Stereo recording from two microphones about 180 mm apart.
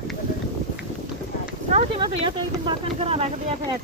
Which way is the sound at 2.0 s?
25° right (ahead or behind).